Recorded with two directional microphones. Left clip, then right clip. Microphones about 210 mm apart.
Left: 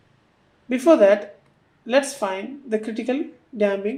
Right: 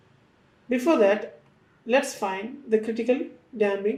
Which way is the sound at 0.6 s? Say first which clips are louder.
Left 6 dB; 35° left (ahead or behind).